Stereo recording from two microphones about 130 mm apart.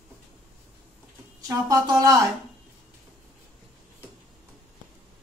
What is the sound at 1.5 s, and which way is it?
Speech, 30° right (ahead or behind).